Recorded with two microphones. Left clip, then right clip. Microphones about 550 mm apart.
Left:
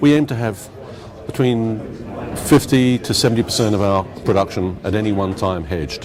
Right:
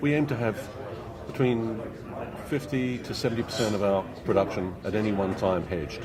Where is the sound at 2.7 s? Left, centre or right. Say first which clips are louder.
Left 14 dB; left.